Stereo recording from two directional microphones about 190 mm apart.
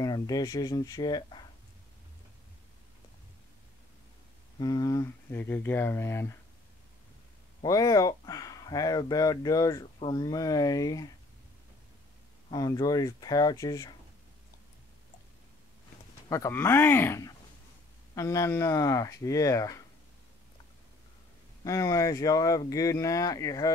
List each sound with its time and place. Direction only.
0.0 s speech: 20° left (ahead or behind)
4.6 s speech: 20° left (ahead or behind)
7.6 s speech: 20° left (ahead or behind)
12.4 s speech: 20° left (ahead or behind)
16.3 s speech: 15° left (ahead or behind)
21.6 s speech: 15° left (ahead or behind)